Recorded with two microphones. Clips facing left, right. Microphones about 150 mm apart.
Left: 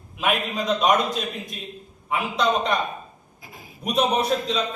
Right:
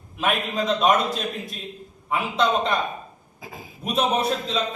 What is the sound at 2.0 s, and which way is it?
Speech, centre (ahead or behind).